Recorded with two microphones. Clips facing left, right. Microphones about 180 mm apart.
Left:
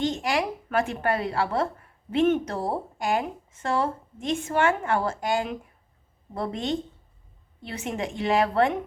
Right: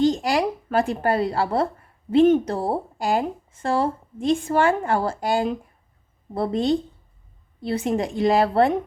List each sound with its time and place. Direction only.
0.0 s a woman's voice: 35° right (ahead or behind)